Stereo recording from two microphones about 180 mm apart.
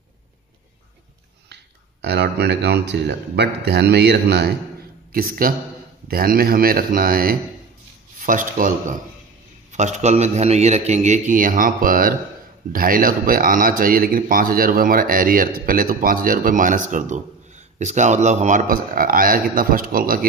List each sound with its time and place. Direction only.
1.5 s speech: 70° right (ahead or behind)
5.1 s a man's voice: 50° right (ahead or behind)